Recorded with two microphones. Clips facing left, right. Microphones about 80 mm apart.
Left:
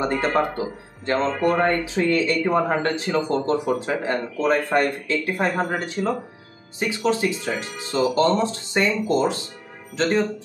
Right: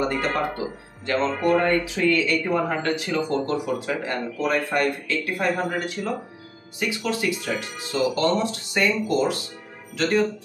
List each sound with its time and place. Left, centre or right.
1.0 s speech: left